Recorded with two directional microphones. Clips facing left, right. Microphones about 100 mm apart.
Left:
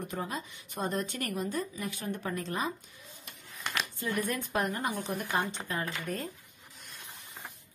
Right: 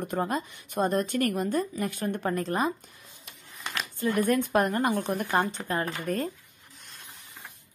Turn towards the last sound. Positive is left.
turn(degrees=-50)  # may be behind; listen again after turning